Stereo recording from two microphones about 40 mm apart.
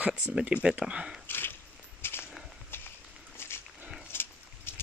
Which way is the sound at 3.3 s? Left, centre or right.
Left.